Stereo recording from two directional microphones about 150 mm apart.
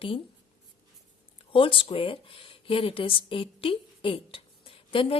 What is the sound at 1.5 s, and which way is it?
A woman's voice, 35° left (ahead or behind).